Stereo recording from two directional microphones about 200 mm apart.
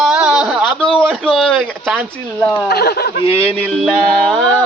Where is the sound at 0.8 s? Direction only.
25° left (ahead or behind).